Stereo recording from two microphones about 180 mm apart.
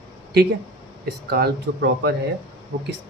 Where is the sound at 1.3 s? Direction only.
60° right (ahead or behind).